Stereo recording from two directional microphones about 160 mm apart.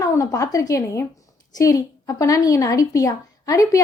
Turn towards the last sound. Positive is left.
turn(degrees=20)  # may be behind; listen again after turning